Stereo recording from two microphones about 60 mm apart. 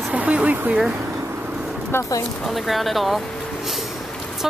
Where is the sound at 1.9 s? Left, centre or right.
Left.